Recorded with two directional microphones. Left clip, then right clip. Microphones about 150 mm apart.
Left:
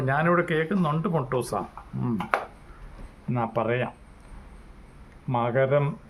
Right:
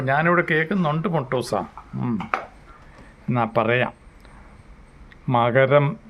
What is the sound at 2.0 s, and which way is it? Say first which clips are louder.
Speech: right 1 dB; 5° right (ahead or behind).